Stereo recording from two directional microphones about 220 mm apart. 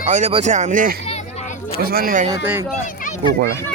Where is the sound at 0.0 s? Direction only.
30° right (ahead or behind).